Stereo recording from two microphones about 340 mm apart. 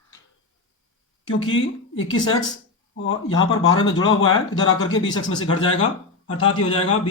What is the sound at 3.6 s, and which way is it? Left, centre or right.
Speech, centre.